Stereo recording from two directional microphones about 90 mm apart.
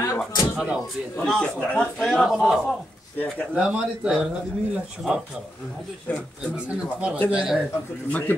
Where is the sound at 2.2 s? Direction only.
5° right (ahead or behind).